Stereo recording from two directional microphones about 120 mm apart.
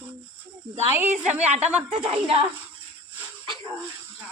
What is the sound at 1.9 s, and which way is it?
Speech, 50° right (ahead or behind).